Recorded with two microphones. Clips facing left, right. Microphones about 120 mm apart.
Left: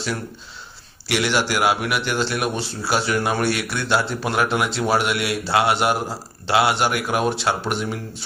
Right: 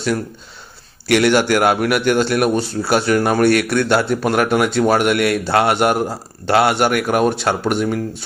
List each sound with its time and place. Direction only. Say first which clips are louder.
1.0 s speech: right 7 dB; 55° right (ahead or behind)